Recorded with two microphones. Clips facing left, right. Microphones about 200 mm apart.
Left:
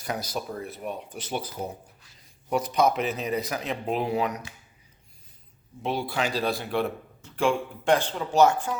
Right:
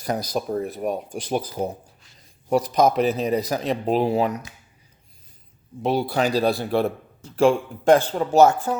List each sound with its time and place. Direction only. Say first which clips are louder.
0.0 s speech: right 6 dB; 40° right (ahead or behind)
5.8 s speech: right 6 dB; 40° right (ahead or behind)